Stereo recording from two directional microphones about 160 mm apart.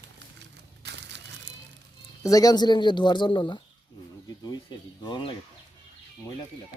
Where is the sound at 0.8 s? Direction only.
90° right.